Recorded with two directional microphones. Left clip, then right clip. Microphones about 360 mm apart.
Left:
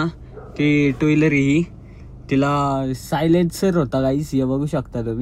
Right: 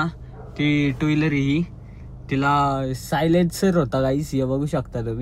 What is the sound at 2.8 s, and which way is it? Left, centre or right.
Speech, centre.